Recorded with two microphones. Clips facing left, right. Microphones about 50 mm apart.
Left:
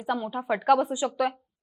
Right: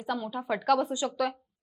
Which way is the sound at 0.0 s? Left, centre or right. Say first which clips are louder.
Left 3 dB; centre.